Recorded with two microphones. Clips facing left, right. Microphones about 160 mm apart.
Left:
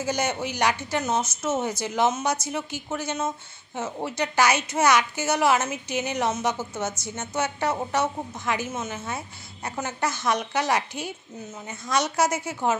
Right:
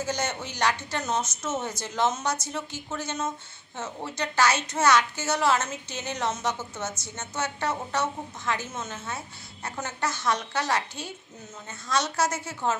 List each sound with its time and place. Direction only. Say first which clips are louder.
0.0 s a woman's voice: left 4 dB; 10° left (ahead or behind)